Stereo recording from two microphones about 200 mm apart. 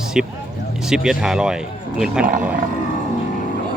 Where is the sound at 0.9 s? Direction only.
5° right (ahead or behind).